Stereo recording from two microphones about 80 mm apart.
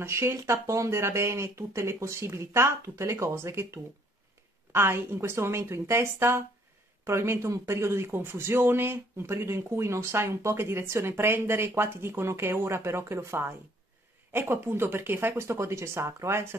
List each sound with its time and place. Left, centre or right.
0.0 s speech: right